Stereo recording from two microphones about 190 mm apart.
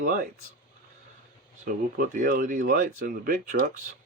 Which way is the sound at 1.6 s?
45° right (ahead or behind).